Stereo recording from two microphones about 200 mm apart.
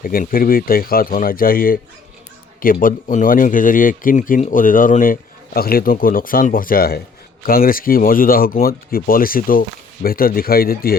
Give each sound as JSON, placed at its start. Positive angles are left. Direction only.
{"t": 0.0, "sound": "speech", "side_deg": 45}